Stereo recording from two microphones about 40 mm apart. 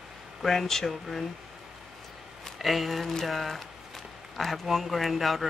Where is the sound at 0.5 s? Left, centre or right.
Centre.